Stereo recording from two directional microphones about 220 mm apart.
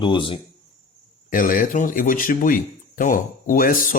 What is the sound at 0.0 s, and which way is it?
Speech, 20° left (ahead or behind).